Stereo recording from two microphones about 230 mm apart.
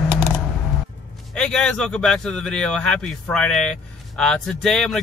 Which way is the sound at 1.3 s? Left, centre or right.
Centre.